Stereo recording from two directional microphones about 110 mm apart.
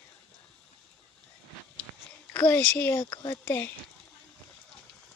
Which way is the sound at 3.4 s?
20° left (ahead or behind).